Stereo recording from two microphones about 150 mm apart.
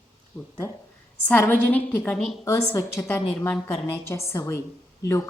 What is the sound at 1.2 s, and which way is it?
Speech, 10° left (ahead or behind).